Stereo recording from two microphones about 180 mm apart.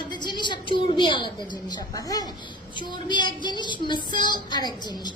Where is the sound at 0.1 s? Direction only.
25° left (ahead or behind).